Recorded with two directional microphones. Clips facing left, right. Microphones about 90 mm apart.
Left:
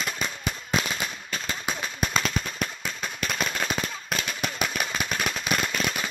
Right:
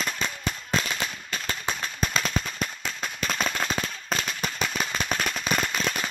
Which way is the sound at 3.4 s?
Centre (ahead or behind).